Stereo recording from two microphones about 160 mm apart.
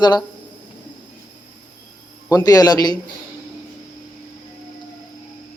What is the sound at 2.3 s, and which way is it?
Speech, 25° left (ahead or behind).